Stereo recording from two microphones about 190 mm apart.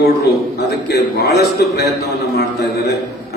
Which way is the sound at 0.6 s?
60° left (ahead or behind).